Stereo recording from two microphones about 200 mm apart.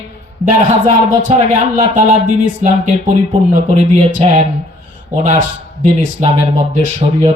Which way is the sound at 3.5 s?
40° right (ahead or behind).